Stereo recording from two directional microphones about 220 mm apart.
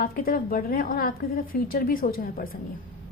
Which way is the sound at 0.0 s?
40° left (ahead or behind).